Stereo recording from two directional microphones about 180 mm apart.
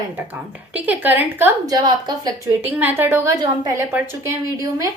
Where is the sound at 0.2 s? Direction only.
10° right (ahead or behind).